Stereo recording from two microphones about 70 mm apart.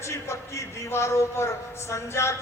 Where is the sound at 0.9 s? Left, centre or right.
Left.